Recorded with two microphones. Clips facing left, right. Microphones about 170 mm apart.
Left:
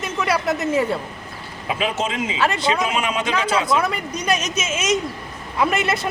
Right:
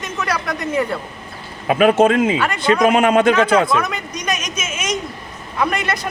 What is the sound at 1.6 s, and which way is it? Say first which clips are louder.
Speech: right 11 dB; 55° right (ahead or behind).